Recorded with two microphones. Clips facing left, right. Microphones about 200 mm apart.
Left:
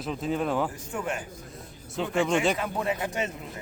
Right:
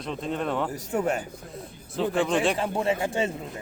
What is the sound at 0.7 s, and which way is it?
Speech, 40° right (ahead or behind).